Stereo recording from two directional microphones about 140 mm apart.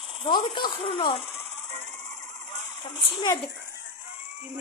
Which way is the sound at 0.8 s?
45° left (ahead or behind).